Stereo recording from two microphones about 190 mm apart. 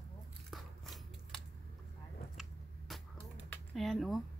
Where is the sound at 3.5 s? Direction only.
Centre (ahead or behind).